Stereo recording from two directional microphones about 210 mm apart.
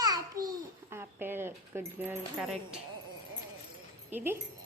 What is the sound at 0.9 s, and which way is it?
Speech, 10° right (ahead or behind).